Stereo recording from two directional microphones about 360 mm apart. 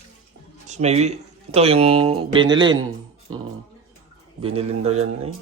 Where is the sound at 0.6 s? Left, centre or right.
Centre.